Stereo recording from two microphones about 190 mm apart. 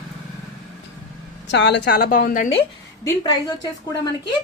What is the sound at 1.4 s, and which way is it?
Speech, 65° left (ahead or behind).